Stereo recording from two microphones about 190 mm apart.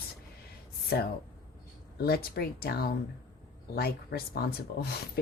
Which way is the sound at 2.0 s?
55° left (ahead or behind).